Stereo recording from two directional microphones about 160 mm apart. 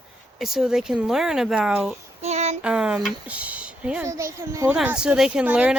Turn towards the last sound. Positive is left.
turn(degrees=-10)  # may be behind; listen again after turning